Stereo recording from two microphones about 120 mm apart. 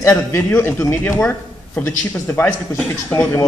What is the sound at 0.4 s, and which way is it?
Speech, 15° left (ahead or behind).